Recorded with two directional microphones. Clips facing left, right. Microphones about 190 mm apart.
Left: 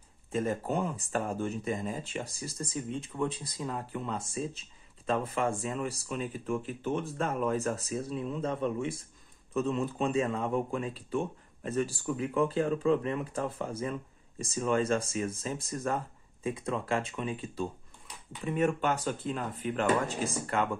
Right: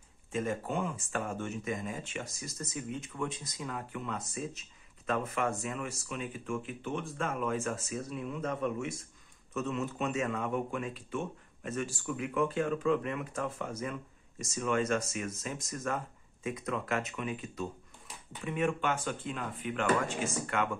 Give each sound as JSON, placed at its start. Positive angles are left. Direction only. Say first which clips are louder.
{"t": 0.3, "sound": "speech", "louder": "left 3 dB", "side_deg": 40}